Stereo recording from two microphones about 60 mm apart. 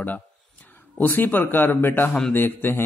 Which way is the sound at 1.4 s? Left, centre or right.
Left.